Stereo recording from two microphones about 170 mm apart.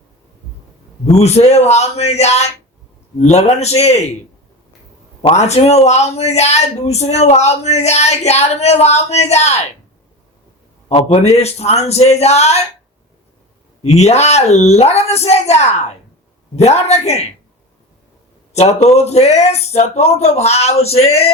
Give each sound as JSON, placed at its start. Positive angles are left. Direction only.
{"t": 1.1, "sound": "a woman's voice", "side_deg": 40}
{"t": 5.2, "sound": "a woman's voice", "side_deg": 40}
{"t": 10.8, "sound": "a woman's voice", "side_deg": 40}
{"t": 13.8, "sound": "a woman's voice", "side_deg": 40}
{"t": 18.5, "sound": "a woman's voice", "side_deg": 40}